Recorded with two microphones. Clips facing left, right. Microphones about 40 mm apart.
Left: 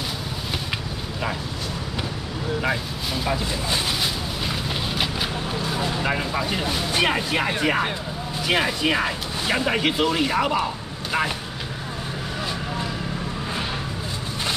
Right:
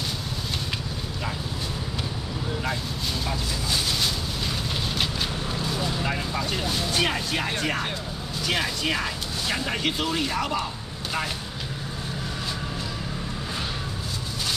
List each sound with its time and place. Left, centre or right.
3.3 s speech: left
4.0 s a sound: centre
5.8 s speech: left